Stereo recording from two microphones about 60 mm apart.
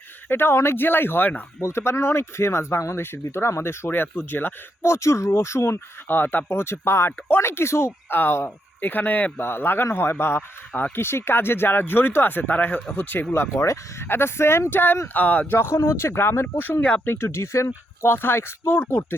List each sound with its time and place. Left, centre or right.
0.3 s speech: left
1.6 s speech: left
3.2 s speech: left
4.8 s speech: left
6.1 s speech: left
9.4 s speech: left
13.6 s speech: left
14.1 s speech: left
18.0 s speech: left
18.7 s speech: left